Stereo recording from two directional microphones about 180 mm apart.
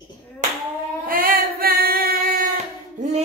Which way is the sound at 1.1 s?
50° right (ahead or behind).